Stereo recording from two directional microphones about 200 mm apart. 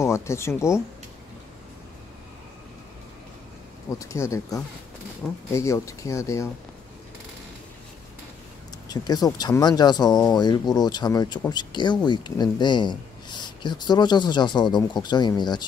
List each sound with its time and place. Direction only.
0.0 s speech: 15° left (ahead or behind)
4.0 s speech: 15° left (ahead or behind)
8.8 s speech: 20° left (ahead or behind)